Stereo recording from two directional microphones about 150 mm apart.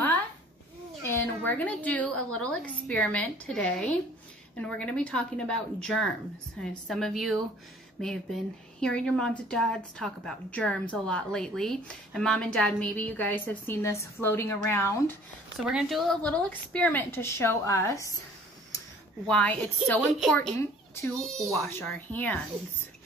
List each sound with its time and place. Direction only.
1.0 s speech: 15° left (ahead or behind)
15.6 s speech: 5° right (ahead or behind); by 18.1 s 20° left (ahead or behind)
19.2 s speech: 10° left (ahead or behind)
20.5 s a child's voice: 20° left (ahead or behind)
21.2 s speech: centre (ahead or behind)